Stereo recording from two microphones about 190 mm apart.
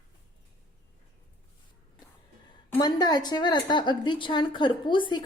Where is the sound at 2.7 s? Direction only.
20° left (ahead or behind).